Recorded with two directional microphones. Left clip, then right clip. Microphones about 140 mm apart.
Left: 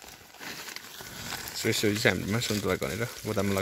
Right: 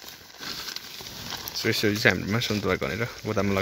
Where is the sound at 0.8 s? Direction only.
5° right (ahead or behind).